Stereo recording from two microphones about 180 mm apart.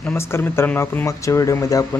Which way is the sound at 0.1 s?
15° left (ahead or behind).